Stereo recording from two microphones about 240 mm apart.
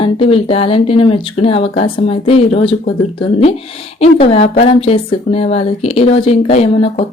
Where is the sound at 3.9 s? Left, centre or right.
Left.